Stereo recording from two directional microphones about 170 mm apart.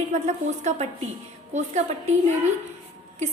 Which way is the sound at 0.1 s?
40° right (ahead or behind).